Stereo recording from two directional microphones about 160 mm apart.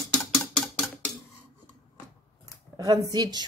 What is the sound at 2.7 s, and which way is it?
Speech, 20° right (ahead or behind).